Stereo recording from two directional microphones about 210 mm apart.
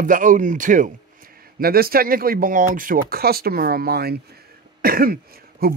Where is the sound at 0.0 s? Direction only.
40° right (ahead or behind).